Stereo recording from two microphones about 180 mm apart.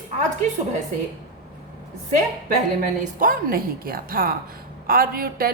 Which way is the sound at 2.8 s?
50° right (ahead or behind).